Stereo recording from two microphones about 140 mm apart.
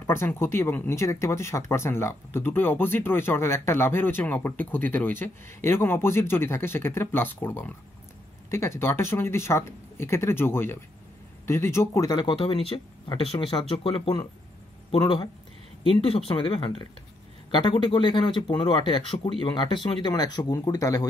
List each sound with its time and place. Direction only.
0.0 s speech: 15° left (ahead or behind)